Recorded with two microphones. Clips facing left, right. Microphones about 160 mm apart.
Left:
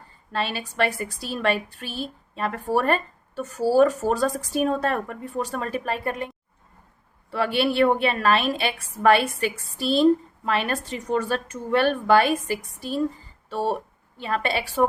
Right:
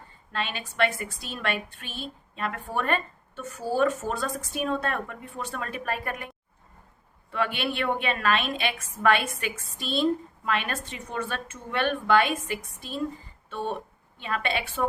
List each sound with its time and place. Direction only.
0.3 s a woman's voice: 35° left (ahead or behind)